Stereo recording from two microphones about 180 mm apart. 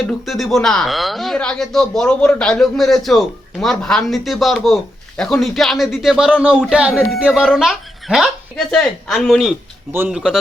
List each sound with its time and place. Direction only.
0.0 s speech: centre (ahead or behind)
6.9 s speech: 5° left (ahead or behind)